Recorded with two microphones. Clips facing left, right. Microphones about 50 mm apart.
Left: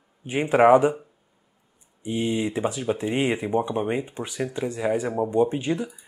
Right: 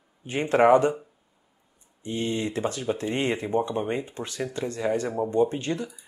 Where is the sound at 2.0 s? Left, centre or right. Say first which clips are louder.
Left 3 dB; centre.